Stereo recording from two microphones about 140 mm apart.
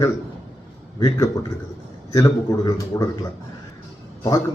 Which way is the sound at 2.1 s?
30° left (ahead or behind).